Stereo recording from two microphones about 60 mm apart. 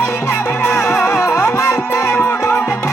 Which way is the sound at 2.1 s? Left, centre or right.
Left.